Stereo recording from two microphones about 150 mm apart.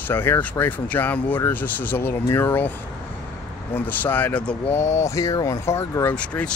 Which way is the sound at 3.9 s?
10° left (ahead or behind).